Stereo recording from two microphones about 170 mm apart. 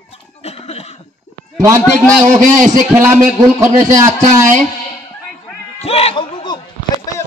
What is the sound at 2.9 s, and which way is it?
Speech, 15° right (ahead or behind).